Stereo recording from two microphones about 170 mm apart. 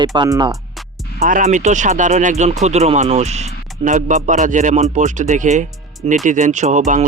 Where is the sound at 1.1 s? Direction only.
50° right (ahead or behind).